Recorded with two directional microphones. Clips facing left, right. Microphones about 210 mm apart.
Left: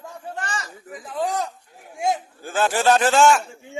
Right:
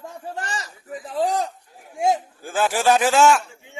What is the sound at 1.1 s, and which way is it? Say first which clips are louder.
Speech: right 2 dB; 30° right (ahead or behind).